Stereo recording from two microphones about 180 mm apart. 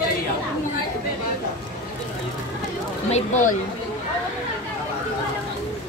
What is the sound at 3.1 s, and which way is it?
Speech, 45° left (ahead or behind).